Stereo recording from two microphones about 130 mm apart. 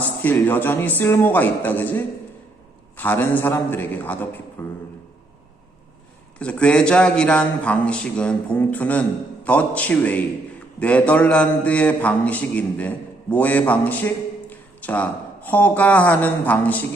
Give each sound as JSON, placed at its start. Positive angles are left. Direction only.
{"t": 0.0, "sound": "a man's voice", "side_deg": 15}
{"t": 6.4, "sound": "a man's voice", "side_deg": 10}